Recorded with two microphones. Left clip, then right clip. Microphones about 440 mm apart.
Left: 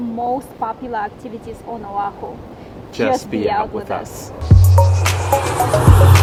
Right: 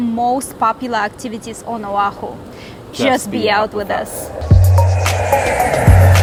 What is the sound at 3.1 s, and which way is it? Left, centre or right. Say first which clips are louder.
Speech: right 4 dB; right.